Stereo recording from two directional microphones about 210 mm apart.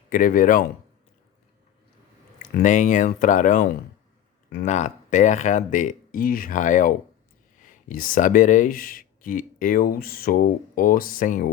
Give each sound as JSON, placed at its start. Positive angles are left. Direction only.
{"t": 0.1, "sound": "speech", "side_deg": 40}
{"t": 2.4, "sound": "speech", "side_deg": 35}